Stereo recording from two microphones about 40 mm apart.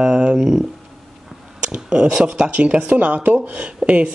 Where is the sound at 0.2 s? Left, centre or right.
Right.